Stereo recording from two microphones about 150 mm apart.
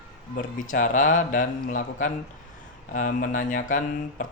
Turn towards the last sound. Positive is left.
turn(degrees=65)  # may be behind; listen again after turning